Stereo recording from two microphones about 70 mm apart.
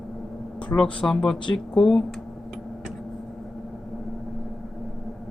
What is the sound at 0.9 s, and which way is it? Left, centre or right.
Speech, centre.